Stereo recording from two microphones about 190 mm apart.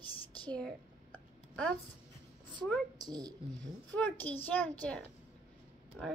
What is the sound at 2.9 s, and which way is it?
Speech, 20° right (ahead or behind).